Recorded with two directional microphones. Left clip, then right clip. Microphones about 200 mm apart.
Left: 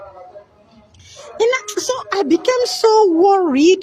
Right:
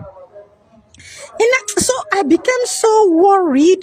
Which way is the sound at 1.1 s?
45° right (ahead or behind).